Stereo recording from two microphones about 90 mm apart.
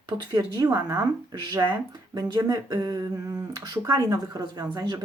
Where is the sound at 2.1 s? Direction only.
45° right (ahead or behind).